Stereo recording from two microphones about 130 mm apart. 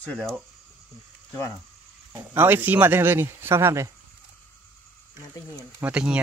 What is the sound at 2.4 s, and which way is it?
Speech, 15° right (ahead or behind).